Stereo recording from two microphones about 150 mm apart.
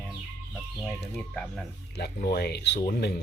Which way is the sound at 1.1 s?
Centre (ahead or behind).